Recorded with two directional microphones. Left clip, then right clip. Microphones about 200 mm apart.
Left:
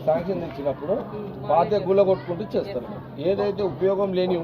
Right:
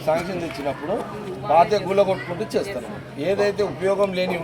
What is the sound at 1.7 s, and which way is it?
Speech, 15° left (ahead or behind).